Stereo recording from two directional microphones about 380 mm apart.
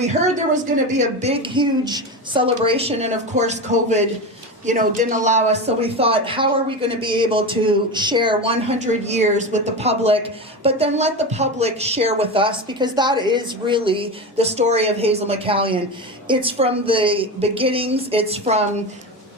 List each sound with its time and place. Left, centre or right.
0.0 s speech: centre